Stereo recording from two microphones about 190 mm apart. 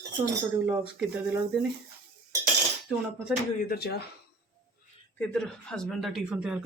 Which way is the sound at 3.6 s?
55° left (ahead or behind).